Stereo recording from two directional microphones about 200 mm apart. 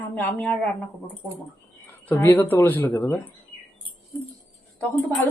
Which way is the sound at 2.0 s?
10° left (ahead or behind).